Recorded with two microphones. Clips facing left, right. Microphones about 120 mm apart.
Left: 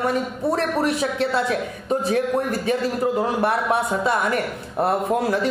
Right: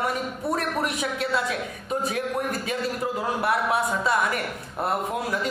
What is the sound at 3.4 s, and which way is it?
Speech, 30° left (ahead or behind).